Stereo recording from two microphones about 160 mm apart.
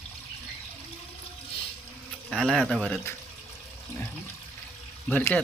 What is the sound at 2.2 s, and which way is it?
Speech, 5° left (ahead or behind).